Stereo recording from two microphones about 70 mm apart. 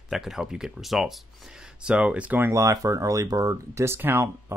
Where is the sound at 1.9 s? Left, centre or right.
Centre.